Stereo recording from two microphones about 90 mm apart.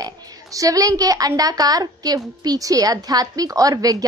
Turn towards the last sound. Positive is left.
turn(degrees=-40)  # may be behind; listen again after turning